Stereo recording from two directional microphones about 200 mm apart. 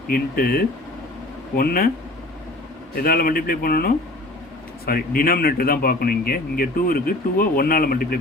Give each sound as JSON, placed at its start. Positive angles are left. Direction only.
{"t": 0.1, "sound": "speech", "side_deg": 50}
{"t": 3.0, "sound": "speech", "side_deg": 45}